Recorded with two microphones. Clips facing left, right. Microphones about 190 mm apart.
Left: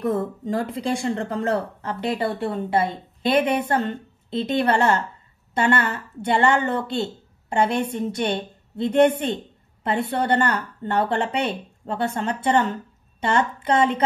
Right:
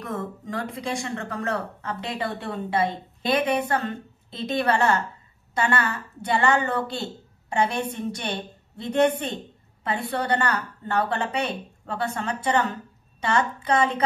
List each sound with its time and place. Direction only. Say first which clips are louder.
0.0 s a woman's voice: left 8 dB; 30° left (ahead or behind)
13.7 s a woman's voice: left 3 dB; 30° left (ahead or behind)